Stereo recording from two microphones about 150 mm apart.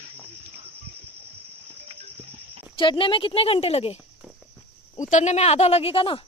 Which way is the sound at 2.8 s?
35° left (ahead or behind).